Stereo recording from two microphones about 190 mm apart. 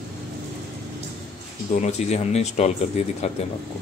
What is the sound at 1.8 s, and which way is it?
Speech, 35° left (ahead or behind).